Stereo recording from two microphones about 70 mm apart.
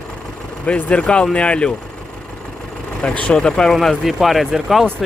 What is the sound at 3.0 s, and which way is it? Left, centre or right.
Speech, centre.